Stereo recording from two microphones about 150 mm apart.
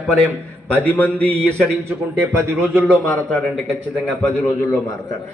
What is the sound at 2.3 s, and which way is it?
Speech, 15° right (ahead or behind).